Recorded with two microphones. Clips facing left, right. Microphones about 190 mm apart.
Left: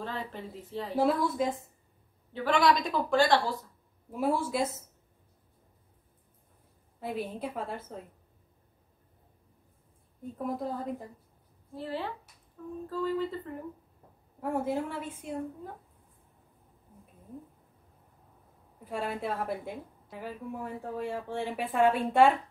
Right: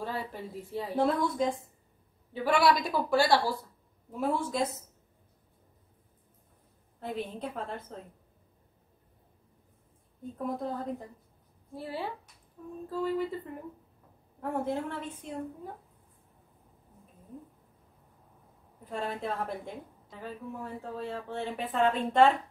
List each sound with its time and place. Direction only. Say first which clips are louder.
0.0 s a woman's voice: right 1 dB; 10° right (ahead or behind)
0.9 s a woman's voice: left 1 dB; 5° left (ahead or behind)
2.3 s a woman's voice: even; 10° right (ahead or behind)
4.1 s a woman's voice: left 1 dB; 10° left (ahead or behind)
7.0 s a woman's voice: left 1 dB; 10° left (ahead or behind)
10.3 s a woman's voice: even; 5° left (ahead or behind)
11.7 s a woman's voice: left 1 dB; 10° right (ahead or behind)
14.4 s a woman's voice: left 1 dB; 10° left (ahead or behind)
18.9 s a woman's voice: left 1 dB; 10° left (ahead or behind)